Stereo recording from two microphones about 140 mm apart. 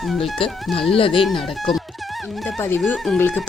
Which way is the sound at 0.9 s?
40° left (ahead or behind).